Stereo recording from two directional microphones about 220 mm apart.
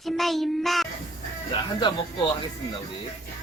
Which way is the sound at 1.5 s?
20° left (ahead or behind).